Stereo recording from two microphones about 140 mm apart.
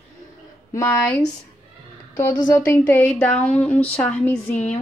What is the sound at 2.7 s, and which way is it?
A woman's voice, 15° left (ahead or behind).